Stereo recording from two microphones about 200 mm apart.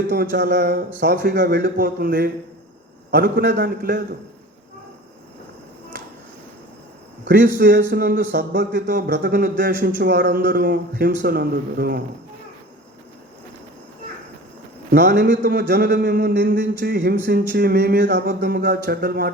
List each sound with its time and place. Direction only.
0.1 s speech: 55° right (ahead or behind)
7.6 s speech: 60° right (ahead or behind)
14.8 s a man's voice: 60° right (ahead or behind)